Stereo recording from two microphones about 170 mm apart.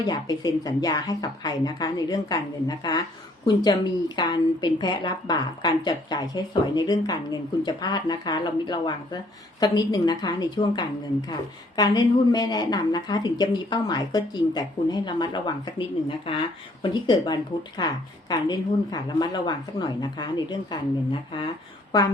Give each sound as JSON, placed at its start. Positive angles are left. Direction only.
{"t": 0.1, "sound": "a woman's voice", "side_deg": 20}